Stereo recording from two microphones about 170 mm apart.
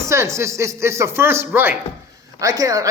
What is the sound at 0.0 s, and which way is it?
A man's voice, 15° right (ahead or behind).